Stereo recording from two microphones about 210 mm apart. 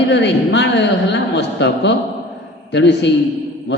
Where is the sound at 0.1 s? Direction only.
55° left (ahead or behind).